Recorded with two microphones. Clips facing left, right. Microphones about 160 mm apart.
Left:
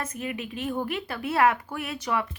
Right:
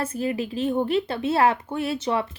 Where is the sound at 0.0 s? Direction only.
30° right (ahead or behind).